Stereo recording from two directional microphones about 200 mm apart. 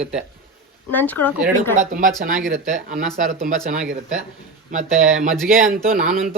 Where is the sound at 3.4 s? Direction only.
40° right (ahead or behind).